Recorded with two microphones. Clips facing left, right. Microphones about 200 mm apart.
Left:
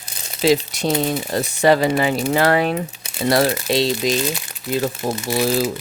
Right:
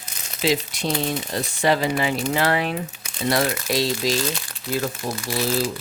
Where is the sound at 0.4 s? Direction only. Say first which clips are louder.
Left 5 dB; 40° left (ahead or behind); by 5.4 s 25° left (ahead or behind).